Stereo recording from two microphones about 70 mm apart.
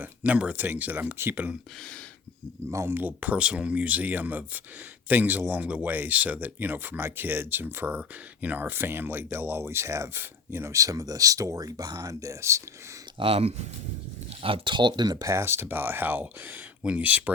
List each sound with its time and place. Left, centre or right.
0.0 s speech: right
2.6 s speech: right
3.0 s speech: right
14.8 s speech: right
15.2 s speech: right